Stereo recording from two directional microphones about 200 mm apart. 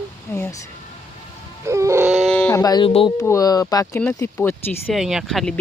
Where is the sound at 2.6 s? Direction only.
20° left (ahead or behind).